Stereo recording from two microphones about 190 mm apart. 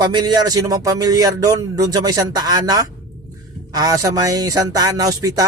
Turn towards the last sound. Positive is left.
turn(degrees=-20)  # may be behind; listen again after turning